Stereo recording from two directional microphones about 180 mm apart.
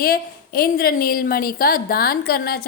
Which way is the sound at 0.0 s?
55° left (ahead or behind).